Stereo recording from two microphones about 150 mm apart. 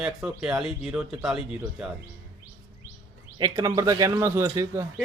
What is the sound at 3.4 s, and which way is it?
Speech, 25° right (ahead or behind).